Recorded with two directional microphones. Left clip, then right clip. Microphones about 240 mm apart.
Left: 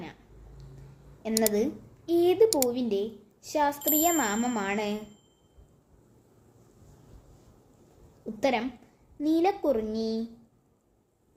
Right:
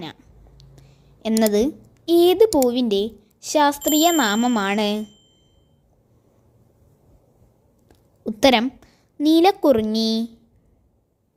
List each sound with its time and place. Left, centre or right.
0.0 s a sound: right
1.5 s a woman's voice: right
8.2 s a woman's voice: right